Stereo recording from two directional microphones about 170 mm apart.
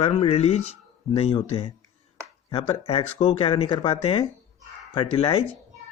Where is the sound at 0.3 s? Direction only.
40° left (ahead or behind).